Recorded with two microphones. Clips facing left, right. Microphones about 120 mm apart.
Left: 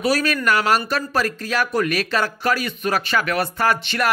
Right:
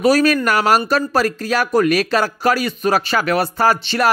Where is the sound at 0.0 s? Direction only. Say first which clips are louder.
Right 6 dB; 40° right (ahead or behind).